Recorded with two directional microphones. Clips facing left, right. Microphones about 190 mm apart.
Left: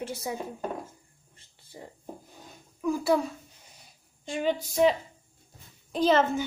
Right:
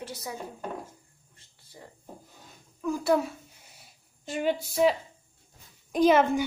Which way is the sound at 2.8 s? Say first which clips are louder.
Even; 5° left (ahead or behind).